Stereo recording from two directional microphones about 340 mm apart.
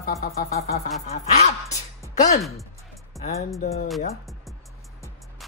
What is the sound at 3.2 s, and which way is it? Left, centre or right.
Speech, left.